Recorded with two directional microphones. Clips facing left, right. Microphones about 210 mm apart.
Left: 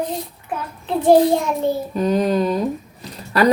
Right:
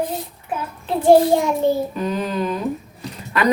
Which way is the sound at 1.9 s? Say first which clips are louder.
Left 5 dB; 35° left (ahead or behind).